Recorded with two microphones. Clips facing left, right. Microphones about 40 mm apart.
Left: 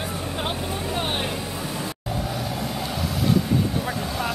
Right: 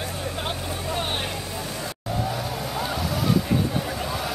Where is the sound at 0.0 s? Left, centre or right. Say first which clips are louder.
Left 1 dB; centre.